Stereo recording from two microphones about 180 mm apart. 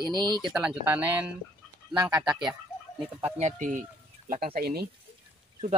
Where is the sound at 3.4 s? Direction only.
40° right (ahead or behind).